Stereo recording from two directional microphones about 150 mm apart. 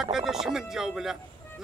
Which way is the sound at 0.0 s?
Centre (ahead or behind).